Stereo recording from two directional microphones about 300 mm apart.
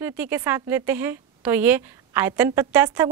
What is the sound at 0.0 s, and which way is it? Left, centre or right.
A woman's voice, centre.